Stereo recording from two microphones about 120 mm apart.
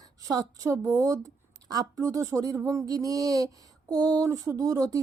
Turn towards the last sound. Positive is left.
turn(degrees=-30)  # may be behind; listen again after turning